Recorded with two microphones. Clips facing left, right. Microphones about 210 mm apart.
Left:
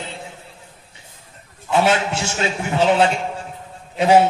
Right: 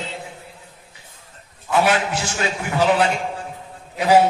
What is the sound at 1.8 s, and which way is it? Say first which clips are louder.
A man's voice: left 1 dB; 25° left (ahead or behind).